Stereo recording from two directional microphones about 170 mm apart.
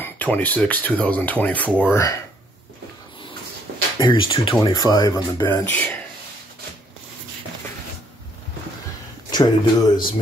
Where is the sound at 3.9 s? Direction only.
30° left (ahead or behind); by 6.0 s 10° left (ahead or behind).